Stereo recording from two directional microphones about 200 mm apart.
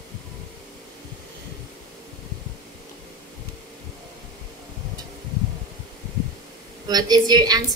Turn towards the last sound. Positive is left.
turn(degrees=-20)  # may be behind; listen again after turning